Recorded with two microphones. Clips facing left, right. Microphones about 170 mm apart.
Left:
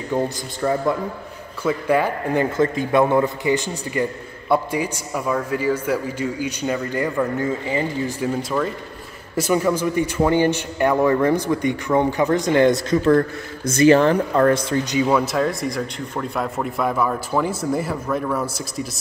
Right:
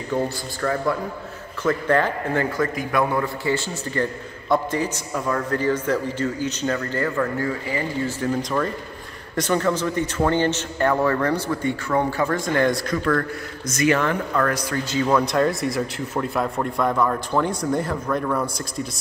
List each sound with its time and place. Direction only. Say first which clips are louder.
0.1 s a man's voice: left 1 dB; 20° left (ahead or behind)
2.5 s a man's voice: left 5 dB; 25° left (ahead or behind)
8.2 s a man's voice: left 1 dB; 5° left (ahead or behind)